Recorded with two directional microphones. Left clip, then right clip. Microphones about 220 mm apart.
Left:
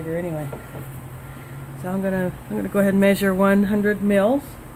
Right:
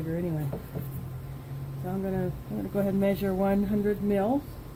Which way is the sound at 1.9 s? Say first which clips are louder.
Left 8 dB; 30° left (ahead or behind).